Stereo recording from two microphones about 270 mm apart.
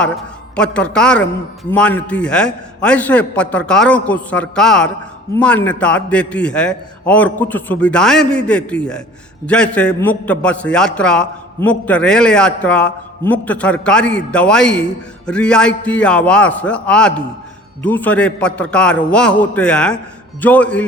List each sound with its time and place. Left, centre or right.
0.0 s a man's voice: centre